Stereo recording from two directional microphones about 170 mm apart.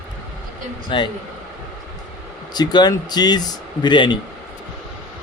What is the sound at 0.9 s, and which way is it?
Speech, 30° left (ahead or behind).